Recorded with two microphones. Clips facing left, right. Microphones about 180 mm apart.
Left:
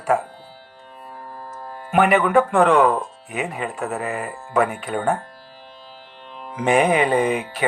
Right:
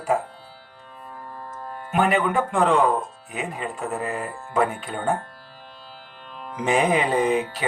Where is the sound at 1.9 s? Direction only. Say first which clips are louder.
Left 5 dB; 70° left (ahead or behind).